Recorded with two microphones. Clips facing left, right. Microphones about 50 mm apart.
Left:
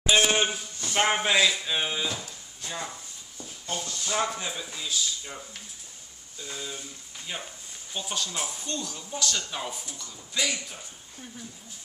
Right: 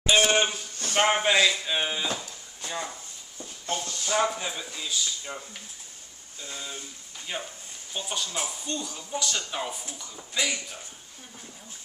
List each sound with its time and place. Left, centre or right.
0.0 s speech: centre
2.6 s a sound: centre
3.6 s speech: right
4.0 s speech: centre